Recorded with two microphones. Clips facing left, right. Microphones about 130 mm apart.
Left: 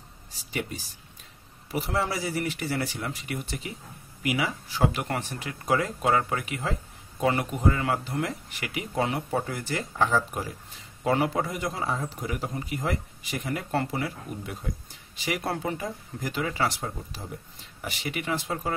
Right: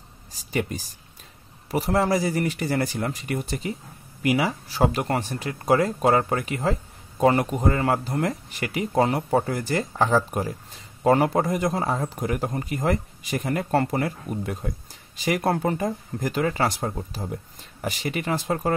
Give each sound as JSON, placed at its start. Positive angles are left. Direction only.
{"t": 0.5, "sound": "a man's voice", "side_deg": -45}